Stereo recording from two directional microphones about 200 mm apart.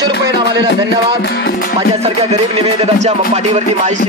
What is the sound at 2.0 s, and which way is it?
A man's voice, 30° right (ahead or behind).